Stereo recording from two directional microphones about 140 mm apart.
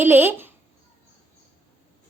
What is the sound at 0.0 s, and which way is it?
Speech, 15° right (ahead or behind).